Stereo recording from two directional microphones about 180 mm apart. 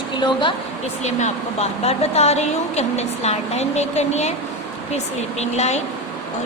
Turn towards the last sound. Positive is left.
turn(degrees=40)  # may be behind; listen again after turning